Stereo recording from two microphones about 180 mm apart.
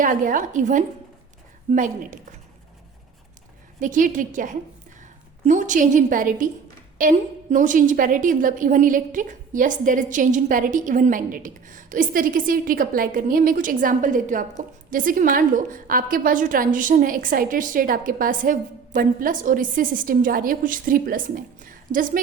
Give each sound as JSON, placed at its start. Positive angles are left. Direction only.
{"t": 0.0, "sound": "a woman's voice", "side_deg": -50}
{"t": 3.8, "sound": "a woman's voice", "side_deg": -45}